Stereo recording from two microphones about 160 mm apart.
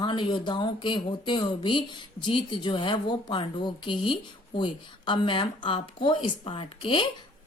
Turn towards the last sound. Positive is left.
turn(degrees=30)  # may be behind; listen again after turning